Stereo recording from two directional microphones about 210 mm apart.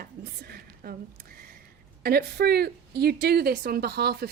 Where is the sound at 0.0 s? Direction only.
45° right (ahead or behind).